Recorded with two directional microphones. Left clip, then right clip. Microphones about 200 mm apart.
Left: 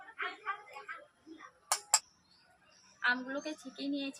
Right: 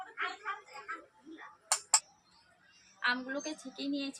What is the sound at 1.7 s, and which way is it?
Tick-tock, 10° left (ahead or behind).